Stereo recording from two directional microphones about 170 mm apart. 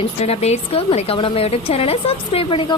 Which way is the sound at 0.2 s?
40° left (ahead or behind).